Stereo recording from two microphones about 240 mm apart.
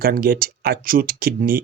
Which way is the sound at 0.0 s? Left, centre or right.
Right.